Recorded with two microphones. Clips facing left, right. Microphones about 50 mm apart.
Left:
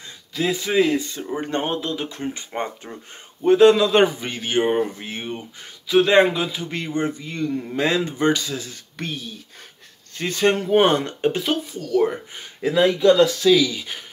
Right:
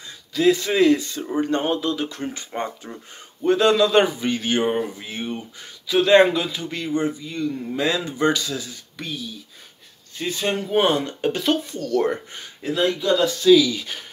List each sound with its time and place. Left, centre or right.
0.3 s a man's voice: centre
4.9 s a man's voice: left
6.8 s speech: left
11.1 s a man's voice: left
11.4 s a man's voice: centre
13.0 s speech: left
13.7 s a man's voice: centre